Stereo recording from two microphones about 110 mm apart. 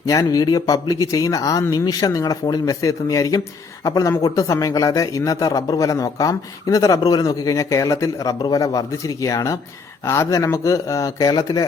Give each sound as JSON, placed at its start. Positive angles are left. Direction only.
{"t": 0.0, "sound": "a man's voice", "side_deg": 30}